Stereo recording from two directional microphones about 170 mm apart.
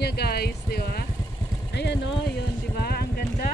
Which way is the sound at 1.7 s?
85° left.